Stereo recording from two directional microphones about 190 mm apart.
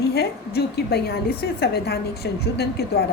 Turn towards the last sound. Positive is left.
turn(degrees=55)  # may be behind; listen again after turning